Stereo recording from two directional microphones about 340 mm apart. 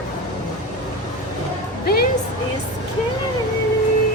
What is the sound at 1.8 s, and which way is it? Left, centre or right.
Music, left.